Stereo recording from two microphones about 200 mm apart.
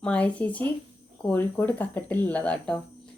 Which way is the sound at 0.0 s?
5° left (ahead or behind).